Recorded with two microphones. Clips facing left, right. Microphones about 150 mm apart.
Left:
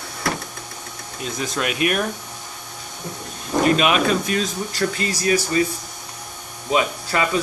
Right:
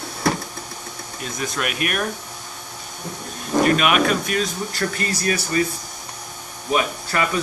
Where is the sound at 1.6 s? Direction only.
25° left (ahead or behind).